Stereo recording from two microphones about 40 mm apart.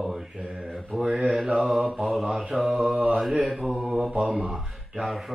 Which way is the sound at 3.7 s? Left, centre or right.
Right.